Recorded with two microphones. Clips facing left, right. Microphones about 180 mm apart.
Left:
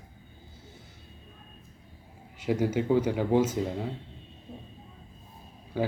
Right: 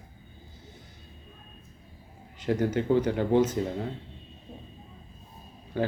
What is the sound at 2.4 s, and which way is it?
Speech, 10° left (ahead or behind).